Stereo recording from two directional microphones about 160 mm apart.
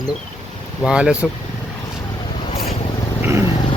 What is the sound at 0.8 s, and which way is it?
Speech, 5° right (ahead or behind).